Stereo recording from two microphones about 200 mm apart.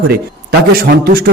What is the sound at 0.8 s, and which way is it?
Speech, 50° right (ahead or behind).